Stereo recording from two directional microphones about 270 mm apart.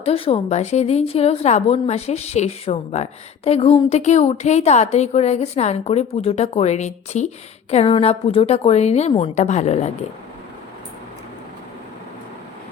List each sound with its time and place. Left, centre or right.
0.0 s a woman's voice: left